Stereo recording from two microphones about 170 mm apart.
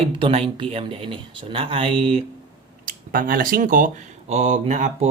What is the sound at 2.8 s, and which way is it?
Speech, 55° right (ahead or behind).